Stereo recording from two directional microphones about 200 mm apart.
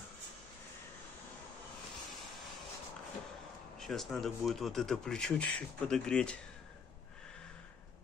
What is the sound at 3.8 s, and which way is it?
Speech, centre (ahead or behind).